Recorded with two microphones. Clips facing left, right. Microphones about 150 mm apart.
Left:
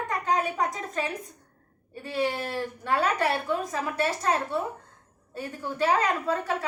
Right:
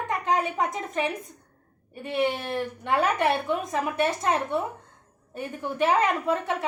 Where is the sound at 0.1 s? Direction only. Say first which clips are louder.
Right 2 dB; 25° right (ahead or behind).